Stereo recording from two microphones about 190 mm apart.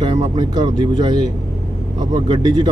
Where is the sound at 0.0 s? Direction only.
25° right (ahead or behind).